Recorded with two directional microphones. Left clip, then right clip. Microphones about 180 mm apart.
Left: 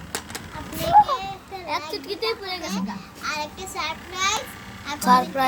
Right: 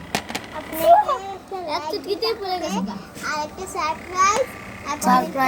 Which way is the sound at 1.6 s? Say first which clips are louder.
Right 2 dB; 20° left (ahead or behind).